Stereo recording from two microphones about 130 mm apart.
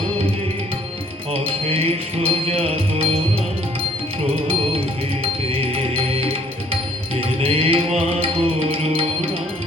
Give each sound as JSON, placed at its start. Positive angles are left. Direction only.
{"t": 1.3, "sound": "music", "side_deg": -50}
{"t": 5.2, "sound": "music", "side_deg": -45}